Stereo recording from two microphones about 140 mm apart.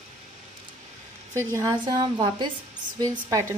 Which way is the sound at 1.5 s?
25° right (ahead or behind).